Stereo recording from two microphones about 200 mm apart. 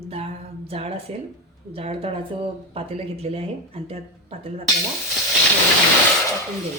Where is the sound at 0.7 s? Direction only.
30° right (ahead or behind).